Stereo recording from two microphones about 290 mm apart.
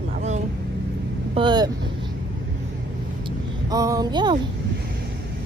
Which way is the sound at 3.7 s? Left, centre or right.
Centre.